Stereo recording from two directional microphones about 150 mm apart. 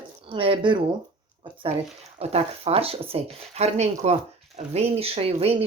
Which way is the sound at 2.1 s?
45° right (ahead or behind).